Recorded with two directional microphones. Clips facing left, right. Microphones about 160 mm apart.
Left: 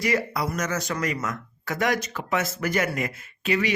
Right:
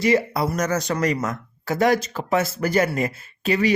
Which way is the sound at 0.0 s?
25° right (ahead or behind).